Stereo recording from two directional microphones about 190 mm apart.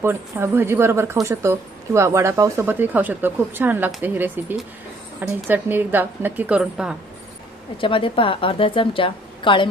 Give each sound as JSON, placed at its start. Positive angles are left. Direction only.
{"t": 0.0, "sound": "speech", "side_deg": -10}
{"t": 7.8, "sound": "a woman's voice", "side_deg": 25}